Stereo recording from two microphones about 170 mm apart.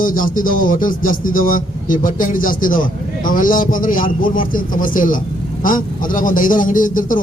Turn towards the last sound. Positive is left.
turn(degrees=55)  # may be behind; listen again after turning